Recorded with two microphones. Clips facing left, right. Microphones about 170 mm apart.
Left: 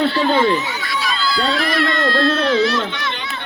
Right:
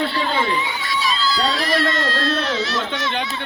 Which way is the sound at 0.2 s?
45° left (ahead or behind).